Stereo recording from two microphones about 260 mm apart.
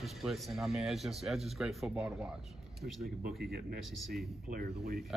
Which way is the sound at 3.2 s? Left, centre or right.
Right.